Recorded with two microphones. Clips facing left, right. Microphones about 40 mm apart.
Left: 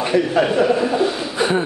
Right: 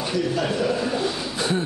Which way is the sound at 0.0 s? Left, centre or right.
Left.